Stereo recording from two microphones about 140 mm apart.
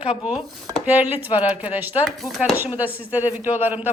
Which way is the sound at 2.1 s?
Centre (ahead or behind).